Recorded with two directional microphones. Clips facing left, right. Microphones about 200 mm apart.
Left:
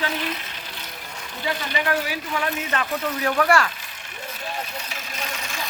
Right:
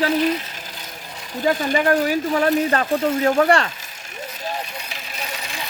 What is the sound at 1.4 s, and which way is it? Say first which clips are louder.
Speech: right 8 dB; 40° right (ahead or behind).